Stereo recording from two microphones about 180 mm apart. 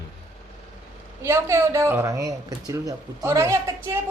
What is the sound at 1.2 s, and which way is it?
Speech, 15° right (ahead or behind).